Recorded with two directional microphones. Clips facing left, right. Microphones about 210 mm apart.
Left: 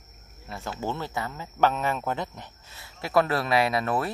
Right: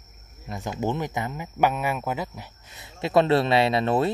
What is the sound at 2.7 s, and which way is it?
Speech, 20° right (ahead or behind).